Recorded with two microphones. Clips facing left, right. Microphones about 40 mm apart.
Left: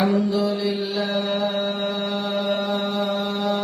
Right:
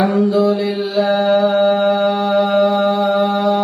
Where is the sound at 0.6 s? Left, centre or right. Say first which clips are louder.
Right 7 dB; right.